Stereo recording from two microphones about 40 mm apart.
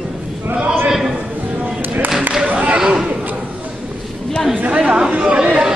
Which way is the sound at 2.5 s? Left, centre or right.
Right.